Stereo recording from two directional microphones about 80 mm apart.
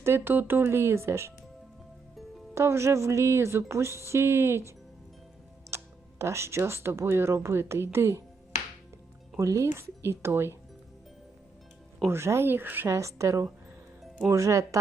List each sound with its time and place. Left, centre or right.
0.0 s speech: right
2.6 s speech: right
5.7 s speech: right
9.4 s speech: right
12.0 s speech: right
12.9 s speech: right